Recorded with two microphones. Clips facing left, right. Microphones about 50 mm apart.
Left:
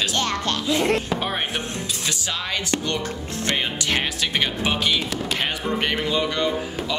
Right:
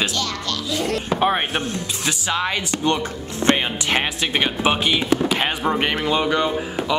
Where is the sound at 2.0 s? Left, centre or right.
Right.